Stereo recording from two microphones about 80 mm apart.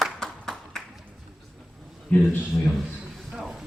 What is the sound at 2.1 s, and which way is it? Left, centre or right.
Speech, left.